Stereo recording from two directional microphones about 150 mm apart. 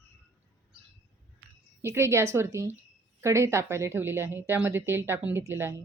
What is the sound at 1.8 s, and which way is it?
A woman's voice, 15° right (ahead or behind).